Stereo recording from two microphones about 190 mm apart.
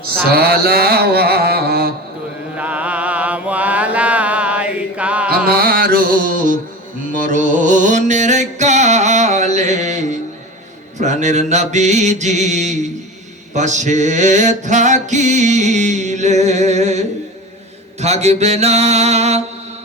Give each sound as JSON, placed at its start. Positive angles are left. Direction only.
{"t": 0.3, "sound": "mantra", "side_deg": -55}
{"t": 2.6, "sound": "mantra", "side_deg": -5}
{"t": 5.3, "sound": "mantra", "side_deg": -50}
{"t": 7.1, "sound": "music", "side_deg": -45}
{"t": 10.9, "sound": "a sound", "side_deg": -40}
{"t": 18.0, "sound": "a sound", "side_deg": -35}